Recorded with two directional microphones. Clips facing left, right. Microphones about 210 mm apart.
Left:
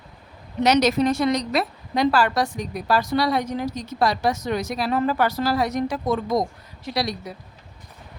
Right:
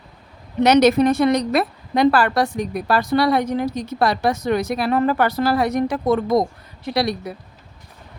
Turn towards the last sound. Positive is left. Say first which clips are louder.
# right 5 dB
turn(degrees=-60)  # may be behind; listen again after turning